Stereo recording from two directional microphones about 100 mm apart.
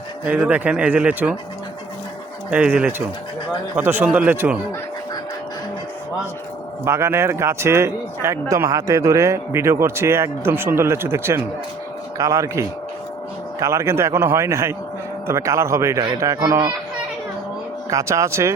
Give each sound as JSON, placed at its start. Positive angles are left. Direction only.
{"t": 0.3, "sound": "speech", "side_deg": -15}
{"t": 2.5, "sound": "speech", "side_deg": -15}
{"t": 6.8, "sound": "speech", "side_deg": -25}
{"t": 17.9, "sound": "speech", "side_deg": -30}